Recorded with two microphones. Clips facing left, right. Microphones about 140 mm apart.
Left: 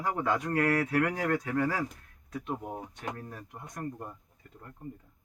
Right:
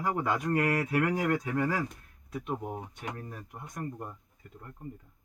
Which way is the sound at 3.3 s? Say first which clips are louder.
Even; 5° right (ahead or behind).